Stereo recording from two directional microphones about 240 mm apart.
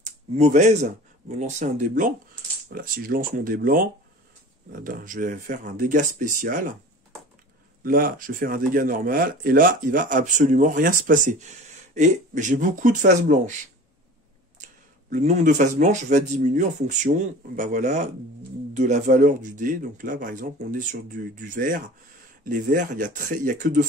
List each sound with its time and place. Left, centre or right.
0.0 s speech: right
7.8 s speech: right
14.6 s speech: right